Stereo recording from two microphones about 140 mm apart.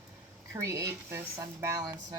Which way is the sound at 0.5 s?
20° right (ahead or behind).